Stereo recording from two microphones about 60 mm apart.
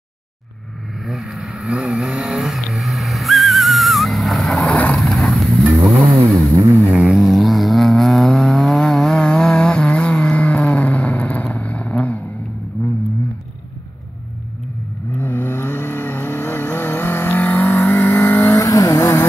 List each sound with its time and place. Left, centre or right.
1.0 s vehicle: centre
2.4 s a sound: centre
4.6 s vehicle: left
4.9 s vehicle: centre; by 12.2 s left
12.8 s vehicle: left
15.1 s vehicle: left
18.6 s vehicle: left